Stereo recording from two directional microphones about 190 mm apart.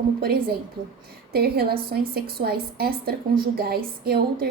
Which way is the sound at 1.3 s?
55° right (ahead or behind).